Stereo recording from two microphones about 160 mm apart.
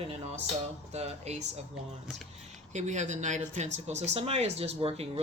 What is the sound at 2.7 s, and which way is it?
Speech, 45° right (ahead or behind).